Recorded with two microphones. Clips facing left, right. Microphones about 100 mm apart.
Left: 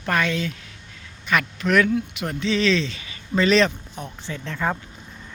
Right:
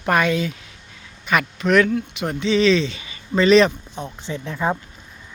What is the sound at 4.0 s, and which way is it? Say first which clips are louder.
Speech: right 4 dB; 20° right (ahead or behind).